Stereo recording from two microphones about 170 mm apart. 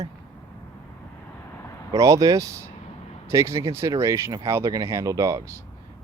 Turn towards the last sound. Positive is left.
turn(degrees=-20)  # may be behind; listen again after turning